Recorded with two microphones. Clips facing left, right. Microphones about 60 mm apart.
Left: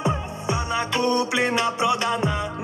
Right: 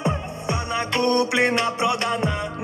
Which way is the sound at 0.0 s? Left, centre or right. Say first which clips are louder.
Even; right.